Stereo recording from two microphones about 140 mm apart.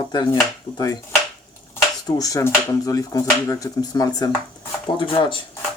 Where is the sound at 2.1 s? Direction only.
25° left (ahead or behind).